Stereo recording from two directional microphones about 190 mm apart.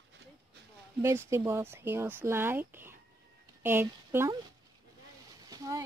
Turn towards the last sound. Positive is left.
turn(degrees=-20)  # may be behind; listen again after turning